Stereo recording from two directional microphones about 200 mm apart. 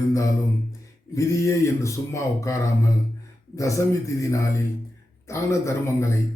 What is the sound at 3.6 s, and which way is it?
Speech, 15° left (ahead or behind).